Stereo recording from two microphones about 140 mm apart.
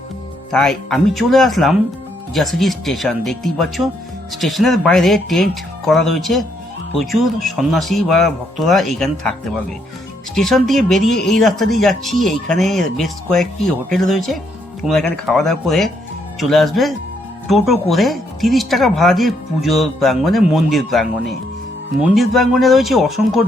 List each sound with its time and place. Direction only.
0.5 s speech: centre (ahead or behind)
10.3 s speech: centre (ahead or behind)